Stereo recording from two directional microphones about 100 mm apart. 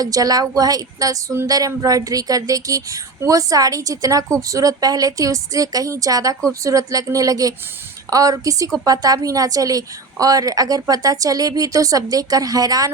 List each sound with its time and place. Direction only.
0.0 s speech: 35° right (ahead or behind)